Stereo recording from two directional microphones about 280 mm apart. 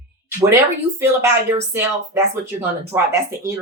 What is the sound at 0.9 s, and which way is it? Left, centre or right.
Speech, centre.